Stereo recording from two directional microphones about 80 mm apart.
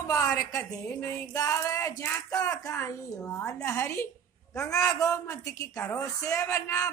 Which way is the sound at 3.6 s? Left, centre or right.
Left.